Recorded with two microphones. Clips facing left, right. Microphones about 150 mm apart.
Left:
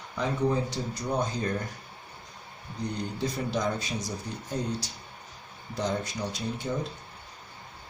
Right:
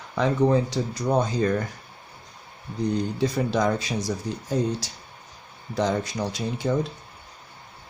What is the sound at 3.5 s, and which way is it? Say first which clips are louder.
Speech: right 6 dB; 90° right.